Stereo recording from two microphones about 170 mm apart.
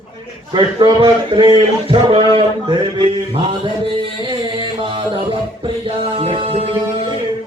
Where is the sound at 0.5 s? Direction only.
25° right (ahead or behind).